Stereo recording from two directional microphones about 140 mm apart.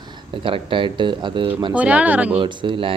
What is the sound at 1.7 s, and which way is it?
Speech, 10° right (ahead or behind).